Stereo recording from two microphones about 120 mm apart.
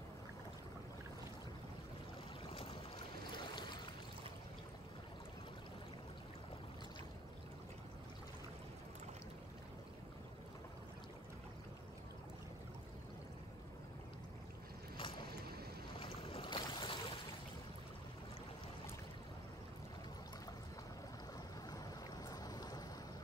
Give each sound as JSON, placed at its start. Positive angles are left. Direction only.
{"t": 2.5, "sound": "boat", "side_deg": 50}
{"t": 15.0, "sound": "boat", "side_deg": 45}
{"t": 21.6, "sound": "boat", "side_deg": 30}